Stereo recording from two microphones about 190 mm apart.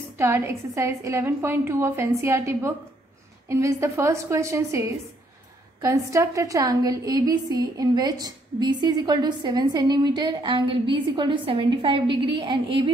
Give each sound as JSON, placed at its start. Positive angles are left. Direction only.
{"t": 0.2, "sound": "a woman's voice", "side_deg": -15}